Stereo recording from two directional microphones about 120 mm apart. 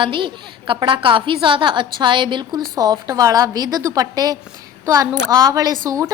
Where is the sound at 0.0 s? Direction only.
45° right (ahead or behind).